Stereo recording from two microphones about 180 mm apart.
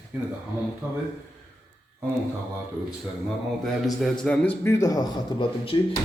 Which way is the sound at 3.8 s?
Centre (ahead or behind).